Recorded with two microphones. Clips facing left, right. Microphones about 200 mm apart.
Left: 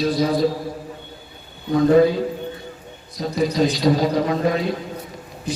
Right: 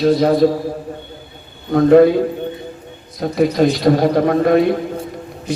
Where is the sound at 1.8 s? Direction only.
60° right (ahead or behind).